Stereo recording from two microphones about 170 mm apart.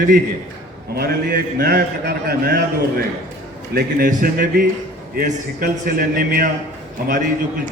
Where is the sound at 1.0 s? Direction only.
65° right (ahead or behind).